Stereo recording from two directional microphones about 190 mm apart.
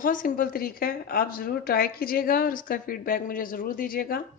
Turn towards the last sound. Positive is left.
turn(degrees=50)  # may be behind; listen again after turning